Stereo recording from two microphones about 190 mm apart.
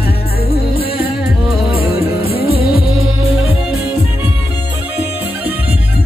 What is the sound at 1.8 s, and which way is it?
Music, 55° left (ahead or behind).